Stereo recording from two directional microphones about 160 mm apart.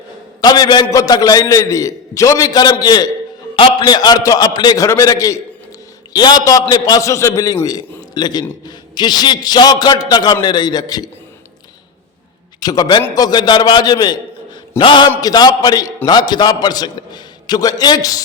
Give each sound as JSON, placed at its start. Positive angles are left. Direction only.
{"t": 0.4, "sound": "a man's voice", "side_deg": 25}
{"t": 12.5, "sound": "a man's voice", "side_deg": 25}